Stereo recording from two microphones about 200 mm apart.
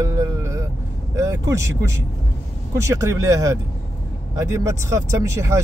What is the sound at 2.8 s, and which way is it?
Speech, 15° right (ahead or behind).